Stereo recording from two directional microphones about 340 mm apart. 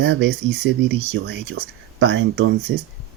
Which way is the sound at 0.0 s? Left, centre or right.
Right.